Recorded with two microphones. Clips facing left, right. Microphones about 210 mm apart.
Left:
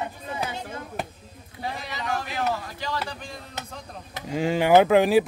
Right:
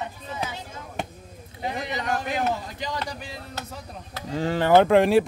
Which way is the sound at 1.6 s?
20° right (ahead or behind).